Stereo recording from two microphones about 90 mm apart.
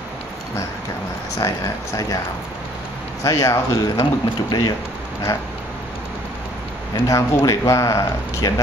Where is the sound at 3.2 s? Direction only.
40° left (ahead or behind).